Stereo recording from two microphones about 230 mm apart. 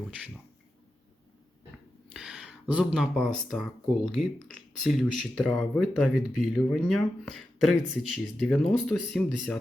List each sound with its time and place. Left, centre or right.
2.1 s speech: centre